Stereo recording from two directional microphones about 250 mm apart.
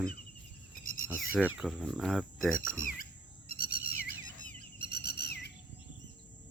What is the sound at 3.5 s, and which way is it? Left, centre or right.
Bird, left.